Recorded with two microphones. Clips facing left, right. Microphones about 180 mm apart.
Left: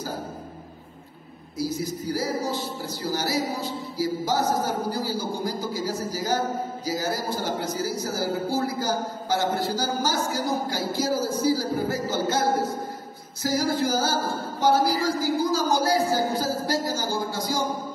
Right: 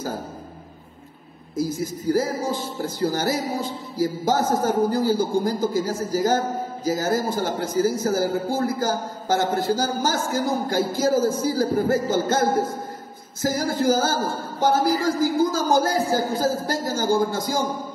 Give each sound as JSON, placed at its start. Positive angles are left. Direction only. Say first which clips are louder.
{"t": 1.6, "sound": "music", "louder": "right 2 dB", "side_deg": -50}